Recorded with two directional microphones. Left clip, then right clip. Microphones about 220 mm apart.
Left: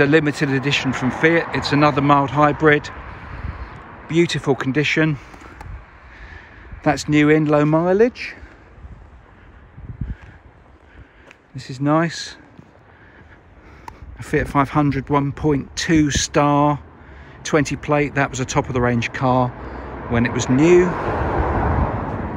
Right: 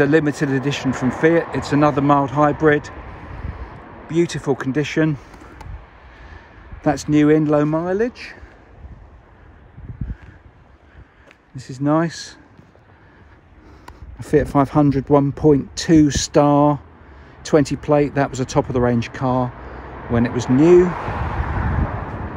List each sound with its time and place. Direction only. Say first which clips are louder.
0.0 s speech: even; 10° right (ahead or behind)
4.1 s speech: left 1 dB; 10° right (ahead or behind)
6.3 s a sound: left 2 dB; 15° right (ahead or behind)
7.6 s speech: left 4 dB; centre (ahead or behind)
11.5 s speech: even; 15° right (ahead or behind)
14.1 s speech: right 2 dB; 25° right (ahead or behind)
20.8 s speech: left 1 dB; 25° left (ahead or behind)